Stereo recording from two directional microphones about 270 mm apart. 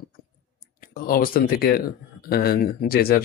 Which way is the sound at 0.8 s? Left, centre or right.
Left.